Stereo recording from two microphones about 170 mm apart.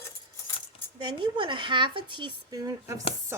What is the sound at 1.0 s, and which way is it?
Speech, 30° right (ahead or behind).